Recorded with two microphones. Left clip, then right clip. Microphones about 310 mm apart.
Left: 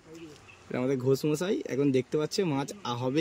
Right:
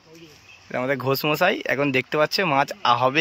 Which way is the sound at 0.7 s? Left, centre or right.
Centre.